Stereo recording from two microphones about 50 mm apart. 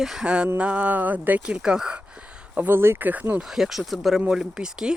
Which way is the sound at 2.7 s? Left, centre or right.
Right.